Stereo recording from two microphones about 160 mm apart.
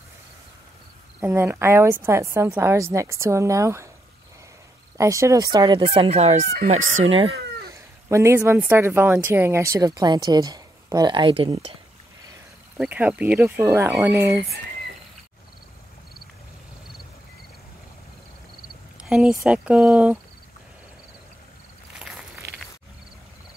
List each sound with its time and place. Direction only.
1.2 s a woman's voice: 15° right (ahead or behind)
4.9 s a woman's voice: 20° right (ahead or behind); by 7.1 s 50° right (ahead or behind)
7.1 s speech: 35° right (ahead or behind)
7.7 s a woman's voice: 20° right (ahead or behind); by 11.7 s 35° right (ahead or behind)
12.7 s a woman's voice: 10° right (ahead or behind)
19.0 s a woman's voice: 5° right (ahead or behind)
21.9 s walk: centre (ahead or behind)